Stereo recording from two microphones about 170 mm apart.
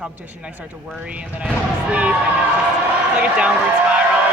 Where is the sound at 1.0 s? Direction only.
10° right (ahead or behind).